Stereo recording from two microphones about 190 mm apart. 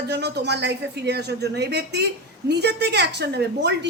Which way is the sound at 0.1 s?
60° right (ahead or behind).